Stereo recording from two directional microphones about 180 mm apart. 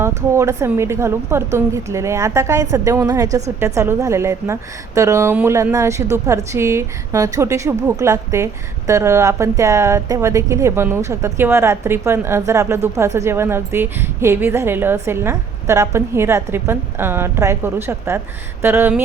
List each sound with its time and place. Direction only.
0.3 s a woman's voice: 15° right (ahead or behind)